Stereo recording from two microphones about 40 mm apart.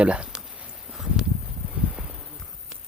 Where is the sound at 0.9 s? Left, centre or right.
Centre.